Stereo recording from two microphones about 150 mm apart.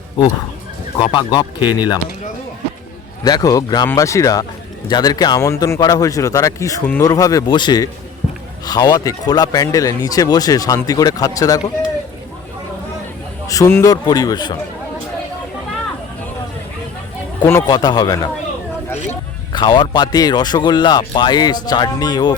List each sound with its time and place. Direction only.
0.9 s speech: 30° left (ahead or behind)
3.2 s speech: 25° left (ahead or behind)
13.5 s speech: 20° left (ahead or behind)
17.4 s speech: 15° left (ahead or behind)
17.7 s speech: 30° left (ahead or behind)
19.5 s speech: 30° left (ahead or behind)